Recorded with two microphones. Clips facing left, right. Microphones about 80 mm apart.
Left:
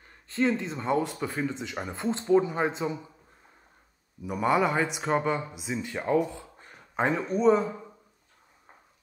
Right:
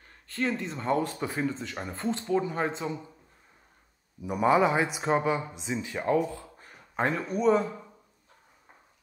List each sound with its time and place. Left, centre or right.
0.6 s speech: centre
1.2 s speech: centre
1.6 s speech: centre
2.0 s speech: left
4.3 s speech: centre